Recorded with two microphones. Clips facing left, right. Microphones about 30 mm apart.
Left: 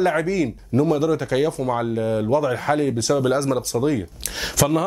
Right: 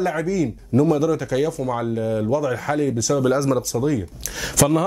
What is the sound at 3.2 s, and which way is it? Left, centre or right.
Speech, centre.